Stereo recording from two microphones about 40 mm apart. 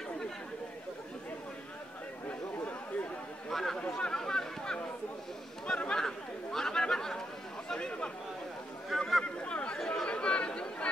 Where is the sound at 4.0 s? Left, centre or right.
Centre.